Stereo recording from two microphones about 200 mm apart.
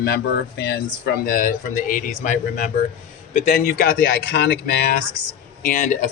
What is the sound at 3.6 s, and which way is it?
Speech, 50° left (ahead or behind).